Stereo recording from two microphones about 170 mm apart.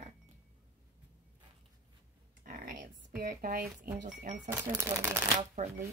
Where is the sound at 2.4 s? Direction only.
60° right (ahead or behind).